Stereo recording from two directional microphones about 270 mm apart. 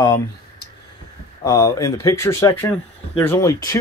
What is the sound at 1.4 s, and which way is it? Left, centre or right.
Speech, centre.